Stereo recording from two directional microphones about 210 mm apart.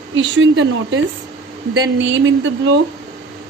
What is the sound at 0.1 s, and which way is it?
A woman's voice, 65° right (ahead or behind).